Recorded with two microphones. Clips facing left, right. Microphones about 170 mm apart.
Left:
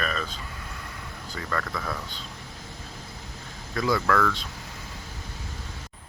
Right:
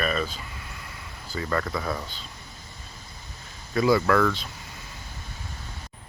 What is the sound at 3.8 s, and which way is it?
Speech, 5° right (ahead or behind).